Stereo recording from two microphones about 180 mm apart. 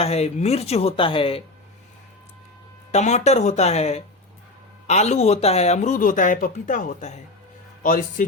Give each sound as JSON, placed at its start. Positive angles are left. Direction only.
{"t": 0.0, "sound": "speech", "side_deg": 35}
{"t": 2.9, "sound": "a man's voice", "side_deg": 40}